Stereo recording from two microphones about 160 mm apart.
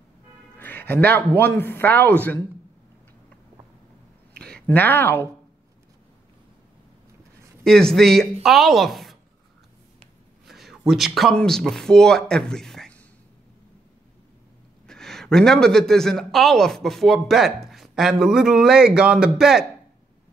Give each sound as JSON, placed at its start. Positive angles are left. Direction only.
{"t": 0.6, "sound": "speech", "side_deg": 10}
{"t": 4.3, "sound": "a sound", "side_deg": -80}
{"t": 4.6, "sound": "speech", "side_deg": 10}
{"t": 7.6, "sound": "speech", "side_deg": 5}
{"t": 10.4, "sound": "a sound", "side_deg": 0}
{"t": 10.9, "sound": "speech", "side_deg": 0}
{"t": 14.9, "sound": "speech", "side_deg": 5}